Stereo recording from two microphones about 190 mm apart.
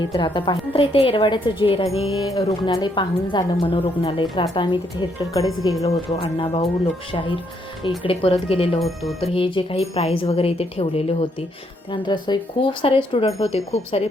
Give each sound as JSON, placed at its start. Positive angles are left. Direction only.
{"t": 0.1, "sound": "a woman's voice", "side_deg": 25}
{"t": 2.2, "sound": "a woman's voice", "side_deg": 20}